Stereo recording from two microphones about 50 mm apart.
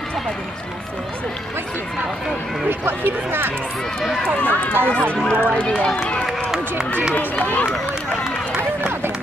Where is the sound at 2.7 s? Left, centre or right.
Right.